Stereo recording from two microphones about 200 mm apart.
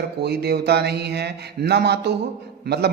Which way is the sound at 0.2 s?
55° right (ahead or behind).